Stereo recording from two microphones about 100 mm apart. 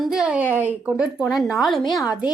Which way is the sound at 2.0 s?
40° left (ahead or behind).